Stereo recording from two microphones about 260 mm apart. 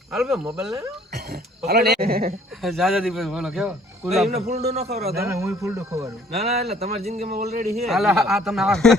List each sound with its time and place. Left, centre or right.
0.1 s speech: centre
1.1 s speech: right
2.6 s speech: centre
4.3 s a man's voice: right
5.1 s speech: centre
6.7 s a man's voice: right
7.9 s speech: centre